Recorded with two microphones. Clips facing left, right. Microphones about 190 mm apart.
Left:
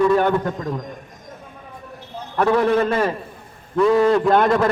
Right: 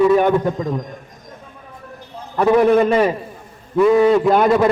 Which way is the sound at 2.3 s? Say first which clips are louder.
Right 4 dB; 15° right (ahead or behind).